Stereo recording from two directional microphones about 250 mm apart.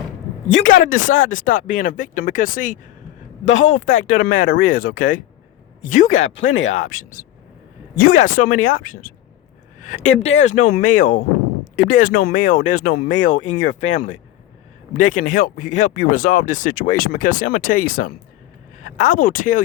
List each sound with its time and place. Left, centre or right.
0.6 s speech: left
6.1 s speech: left
6.7 s speech: left